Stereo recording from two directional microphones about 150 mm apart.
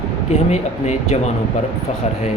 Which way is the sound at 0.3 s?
50° left (ahead or behind).